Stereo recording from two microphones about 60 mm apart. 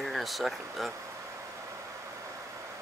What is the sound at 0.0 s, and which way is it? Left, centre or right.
Speech, centre.